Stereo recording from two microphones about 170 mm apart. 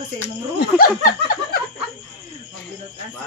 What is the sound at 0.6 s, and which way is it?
Speech, 60° left (ahead or behind).